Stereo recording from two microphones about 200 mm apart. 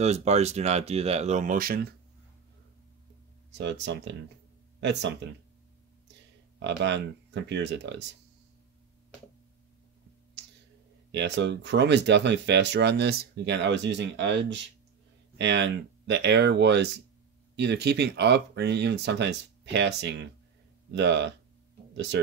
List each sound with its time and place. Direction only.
0.0 s speech: 35° right (ahead or behind)
3.5 s speech: 60° right (ahead or behind)
6.6 s speech: 60° right (ahead or behind)
11.1 s speech: 60° right (ahead or behind)